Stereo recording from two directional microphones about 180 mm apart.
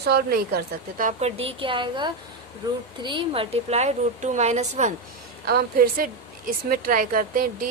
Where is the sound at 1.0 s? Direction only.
40° right (ahead or behind).